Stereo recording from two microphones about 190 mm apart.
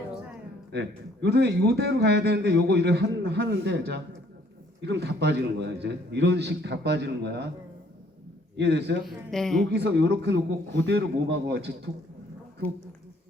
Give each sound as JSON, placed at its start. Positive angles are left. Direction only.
{"t": 0.7, "sound": "a man's voice", "side_deg": -65}
{"t": 8.5, "sound": "a man's voice", "side_deg": -65}
{"t": 9.0, "sound": "speech", "side_deg": 0}
{"t": 9.7, "sound": "a man's voice", "side_deg": -65}